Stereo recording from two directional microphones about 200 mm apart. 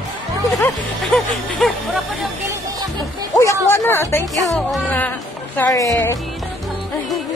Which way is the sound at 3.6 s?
10° left (ahead or behind).